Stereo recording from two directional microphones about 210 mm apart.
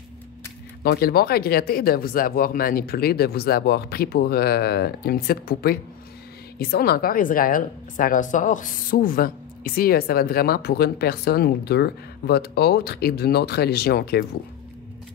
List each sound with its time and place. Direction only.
0.8 s a woman's voice: 45° left (ahead or behind)